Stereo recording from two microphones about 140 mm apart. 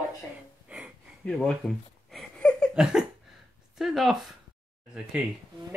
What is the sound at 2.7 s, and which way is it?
Speech, 5° right (ahead or behind).